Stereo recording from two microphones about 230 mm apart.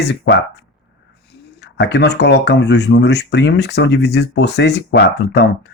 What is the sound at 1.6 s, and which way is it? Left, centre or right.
Speech, left.